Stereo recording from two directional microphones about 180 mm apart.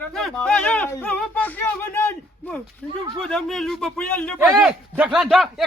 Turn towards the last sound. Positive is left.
turn(degrees=0)  # may be behind; listen again after turning